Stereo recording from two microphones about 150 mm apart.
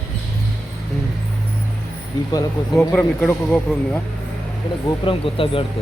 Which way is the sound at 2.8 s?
10° left (ahead or behind).